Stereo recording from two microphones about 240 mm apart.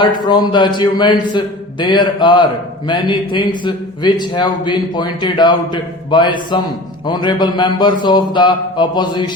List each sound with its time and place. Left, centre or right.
0.0 s a man's voice: centre